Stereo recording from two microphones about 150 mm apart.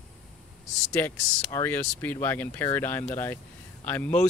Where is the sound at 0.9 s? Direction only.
10° left (ahead or behind).